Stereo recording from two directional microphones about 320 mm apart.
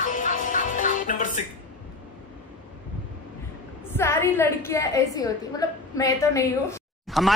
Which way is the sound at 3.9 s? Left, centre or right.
Centre.